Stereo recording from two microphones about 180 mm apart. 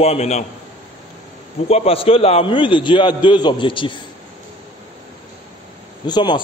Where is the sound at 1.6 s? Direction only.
35° left (ahead or behind).